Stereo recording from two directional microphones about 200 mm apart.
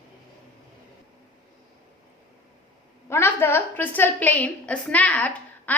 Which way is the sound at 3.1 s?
10° left (ahead or behind).